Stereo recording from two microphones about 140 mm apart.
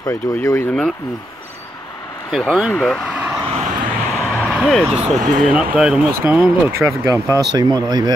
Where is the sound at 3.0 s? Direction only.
10° right (ahead or behind).